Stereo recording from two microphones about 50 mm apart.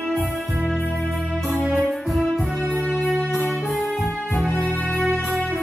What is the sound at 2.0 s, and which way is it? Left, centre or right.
Music, centre.